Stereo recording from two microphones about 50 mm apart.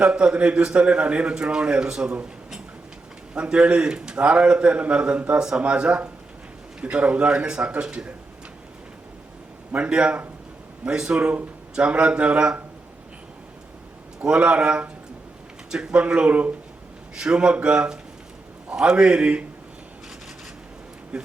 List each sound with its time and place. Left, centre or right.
0.0 s a man's voice: right
3.3 s a man's voice: right
9.7 s a man's voice: right
11.2 s a man's voice: right
14.2 s a man's voice: right
21.1 s speech: centre